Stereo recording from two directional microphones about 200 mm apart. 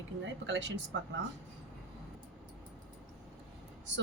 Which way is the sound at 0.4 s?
65° right (ahead or behind).